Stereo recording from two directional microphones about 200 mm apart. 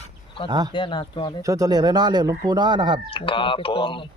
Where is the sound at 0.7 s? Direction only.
25° left (ahead or behind).